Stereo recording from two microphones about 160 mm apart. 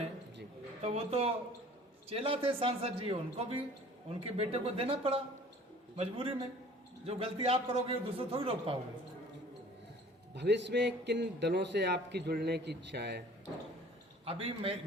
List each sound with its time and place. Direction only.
0.8 s a man's voice: 40° right (ahead or behind)
10.3 s a man's voice: 90° right
14.3 s a man's voice: 35° right (ahead or behind)